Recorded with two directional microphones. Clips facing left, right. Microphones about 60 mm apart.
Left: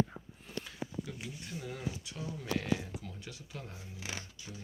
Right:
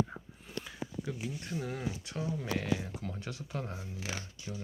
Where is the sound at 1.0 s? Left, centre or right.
Right.